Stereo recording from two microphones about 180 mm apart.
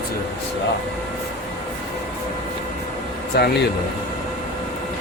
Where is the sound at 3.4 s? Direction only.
60° left (ahead or behind).